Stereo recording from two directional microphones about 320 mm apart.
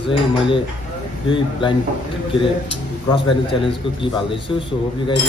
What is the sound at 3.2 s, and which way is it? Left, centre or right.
A man's voice, centre.